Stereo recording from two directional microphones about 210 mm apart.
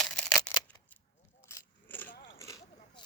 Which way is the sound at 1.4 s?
10° left (ahead or behind).